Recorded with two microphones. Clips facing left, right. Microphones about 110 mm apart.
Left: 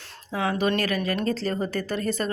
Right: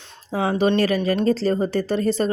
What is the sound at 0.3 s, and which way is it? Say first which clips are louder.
Speech: right 5 dB; 35° right (ahead or behind).